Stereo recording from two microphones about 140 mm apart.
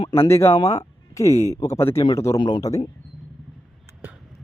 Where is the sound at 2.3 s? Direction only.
30° left (ahead or behind).